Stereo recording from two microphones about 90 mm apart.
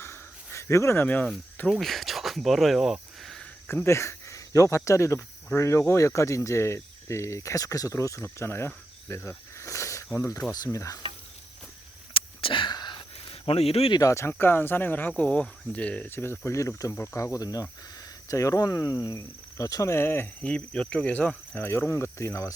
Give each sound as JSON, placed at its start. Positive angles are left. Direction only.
{"t": 0.0, "sound": "a sound", "side_deg": 30}
{"t": 1.0, "sound": "speech", "side_deg": 15}
{"t": 1.8, "sound": "speech", "side_deg": 0}
{"t": 3.7, "sound": "speech", "side_deg": 30}
{"t": 5.5, "sound": "cricket", "side_deg": 35}
{"t": 10.5, "sound": "stir", "side_deg": 40}
{"t": 12.1, "sound": "a sound", "side_deg": 75}
{"t": 14.1, "sound": "speech", "side_deg": 30}
{"t": 16.1, "sound": "cricket", "side_deg": 25}
{"t": 20.4, "sound": "speech", "side_deg": 15}